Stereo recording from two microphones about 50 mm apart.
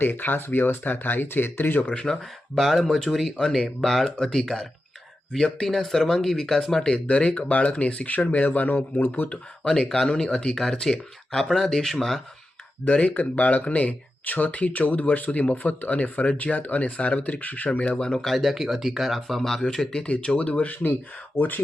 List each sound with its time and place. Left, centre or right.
0.0 s speech: left
1.8 s speech: centre
2.6 s speech: centre; by 9.3 s left
9.3 s speech: left; by 12.2 s centre
12.8 s speech: left
17.9 s speech: centre
18.3 s speech: centre; by 21.6 s left